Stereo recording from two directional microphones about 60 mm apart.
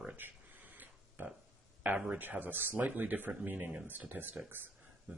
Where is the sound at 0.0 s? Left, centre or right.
Right.